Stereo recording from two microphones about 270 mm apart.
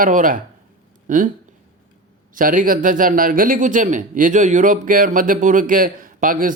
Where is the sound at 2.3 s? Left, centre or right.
Right.